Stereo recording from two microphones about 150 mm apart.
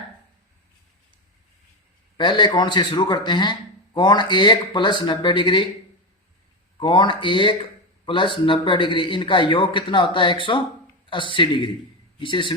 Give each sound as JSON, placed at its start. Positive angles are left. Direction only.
{"t": 2.1, "sound": "a man's voice", "side_deg": 30}
{"t": 6.7, "sound": "a man's voice", "side_deg": 30}